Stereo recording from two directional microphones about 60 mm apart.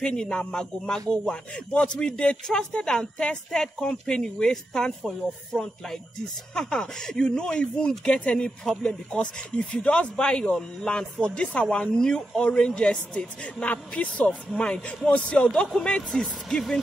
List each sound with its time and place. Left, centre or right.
0.0 s a man's voice: centre